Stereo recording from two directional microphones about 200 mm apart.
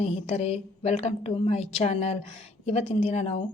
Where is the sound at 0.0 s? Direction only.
30° left (ahead or behind).